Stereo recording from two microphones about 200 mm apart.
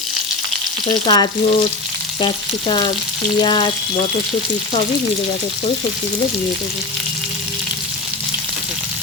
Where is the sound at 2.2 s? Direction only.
25° left (ahead or behind).